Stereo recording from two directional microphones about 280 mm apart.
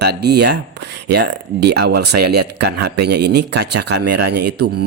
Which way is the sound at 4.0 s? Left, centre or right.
Right.